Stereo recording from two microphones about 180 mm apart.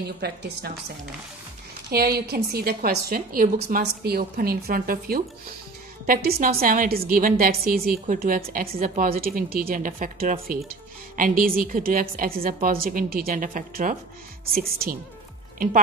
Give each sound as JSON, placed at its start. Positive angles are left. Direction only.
{"t": 0.2, "sound": "a woman's voice", "side_deg": -65}
{"t": 1.9, "sound": "a woman's voice", "side_deg": -60}
{"t": 3.5, "sound": "a woman's voice", "side_deg": -60}